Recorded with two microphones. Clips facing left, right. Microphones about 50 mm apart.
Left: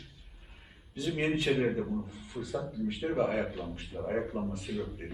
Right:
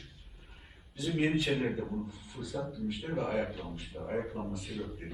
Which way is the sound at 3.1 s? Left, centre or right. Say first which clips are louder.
Left 3 dB; centre.